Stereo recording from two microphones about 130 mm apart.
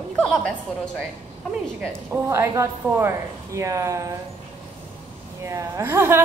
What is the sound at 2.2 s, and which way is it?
A woman's voice, 20° right (ahead or behind).